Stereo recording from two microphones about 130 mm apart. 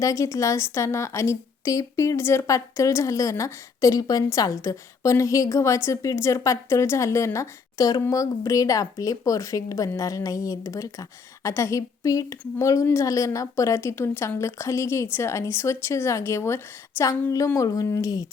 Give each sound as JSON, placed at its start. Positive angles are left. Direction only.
{"t": 0.0, "sound": "a woman's voice", "side_deg": 25}